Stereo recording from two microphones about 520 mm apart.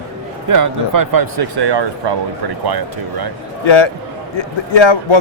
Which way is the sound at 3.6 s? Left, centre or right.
Left.